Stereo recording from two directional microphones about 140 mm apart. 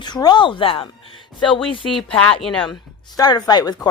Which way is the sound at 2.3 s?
5° left (ahead or behind).